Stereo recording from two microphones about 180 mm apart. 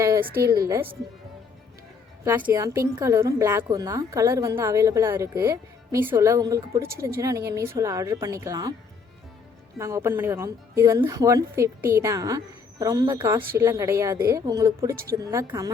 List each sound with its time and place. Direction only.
0.0 s a sound: 15° right (ahead or behind)
0.4 s a woman's voice: 20° right (ahead or behind)
2.2 s a woman's voice: 15° right (ahead or behind)
9.7 s a woman's voice: 15° right (ahead or behind)